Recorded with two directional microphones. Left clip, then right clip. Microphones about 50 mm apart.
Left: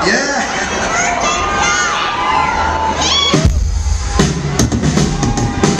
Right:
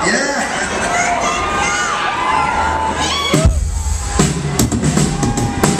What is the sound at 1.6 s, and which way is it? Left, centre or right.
Children shouting, left.